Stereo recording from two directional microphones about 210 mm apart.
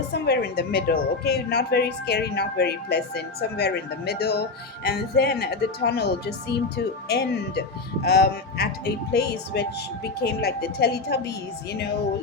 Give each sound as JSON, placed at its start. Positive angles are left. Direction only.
{"t": 0.1, "sound": "a woman's voice", "side_deg": 50}